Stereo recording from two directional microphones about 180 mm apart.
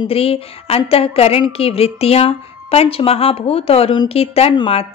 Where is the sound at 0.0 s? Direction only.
30° left (ahead or behind).